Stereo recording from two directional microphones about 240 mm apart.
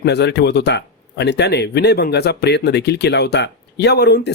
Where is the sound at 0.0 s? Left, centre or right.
Left.